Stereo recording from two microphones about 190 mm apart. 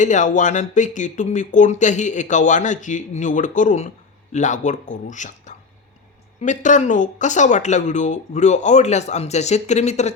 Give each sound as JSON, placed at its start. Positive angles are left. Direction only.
{"t": 0.0, "sound": "speech", "side_deg": 40}